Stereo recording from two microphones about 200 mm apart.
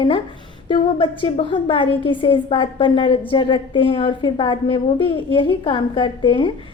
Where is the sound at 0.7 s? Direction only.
25° left (ahead or behind).